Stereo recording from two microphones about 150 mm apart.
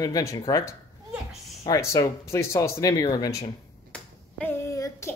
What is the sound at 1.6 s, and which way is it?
Speech, 20° left (ahead or behind).